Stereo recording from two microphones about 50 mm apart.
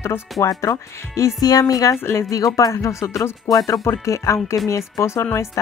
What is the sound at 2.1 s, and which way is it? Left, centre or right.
Speech, left.